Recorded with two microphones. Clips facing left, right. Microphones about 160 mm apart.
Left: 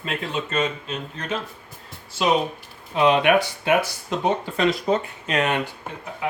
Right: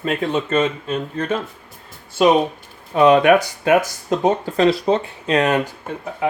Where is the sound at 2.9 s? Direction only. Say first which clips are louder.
Right 5 dB; 45° right (ahead or behind).